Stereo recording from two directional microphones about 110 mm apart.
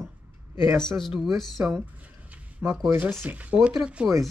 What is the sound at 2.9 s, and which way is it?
Speech, 15° right (ahead or behind).